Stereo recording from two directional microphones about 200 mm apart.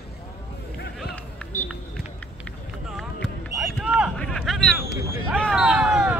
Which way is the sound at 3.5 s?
10° right (ahead or behind).